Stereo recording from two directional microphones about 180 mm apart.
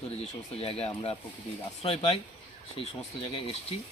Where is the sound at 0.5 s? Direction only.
30° left (ahead or behind).